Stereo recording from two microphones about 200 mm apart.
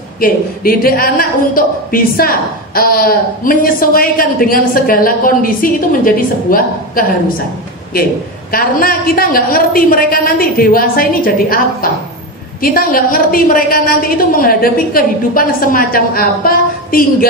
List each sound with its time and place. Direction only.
0.2 s a woman's voice: 45° left (ahead or behind)
8.5 s a woman's voice: 45° left (ahead or behind)